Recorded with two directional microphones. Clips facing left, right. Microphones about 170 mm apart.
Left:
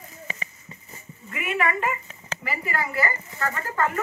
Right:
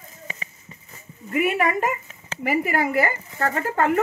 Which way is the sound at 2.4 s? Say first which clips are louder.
Right 8 dB; 60° right (ahead or behind).